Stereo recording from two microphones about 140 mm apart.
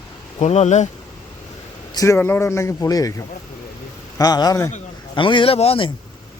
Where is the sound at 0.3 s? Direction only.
55° left (ahead or behind).